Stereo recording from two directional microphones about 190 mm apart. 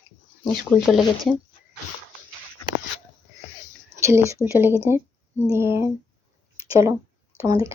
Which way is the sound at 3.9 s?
15° right (ahead or behind).